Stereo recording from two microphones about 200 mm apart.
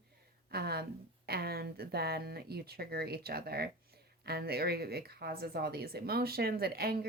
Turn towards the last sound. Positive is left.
turn(degrees=-50)  # may be behind; listen again after turning